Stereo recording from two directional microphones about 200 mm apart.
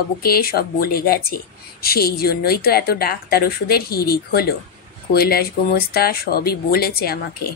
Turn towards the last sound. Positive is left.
turn(degrees=50)  # may be behind; listen again after turning